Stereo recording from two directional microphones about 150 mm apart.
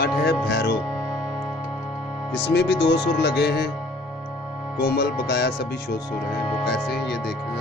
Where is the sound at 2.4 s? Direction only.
90° left.